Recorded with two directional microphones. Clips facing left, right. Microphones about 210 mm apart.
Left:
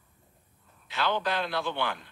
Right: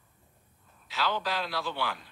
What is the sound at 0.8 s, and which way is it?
Speech, centre (ahead or behind).